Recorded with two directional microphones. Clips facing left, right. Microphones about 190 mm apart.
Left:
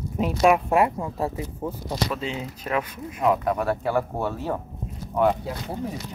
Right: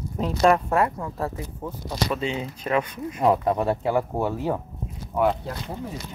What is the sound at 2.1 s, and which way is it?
Speech, centre (ahead or behind).